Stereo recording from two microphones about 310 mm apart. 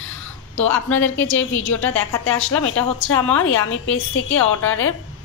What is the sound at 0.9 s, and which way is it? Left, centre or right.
A woman's voice, left.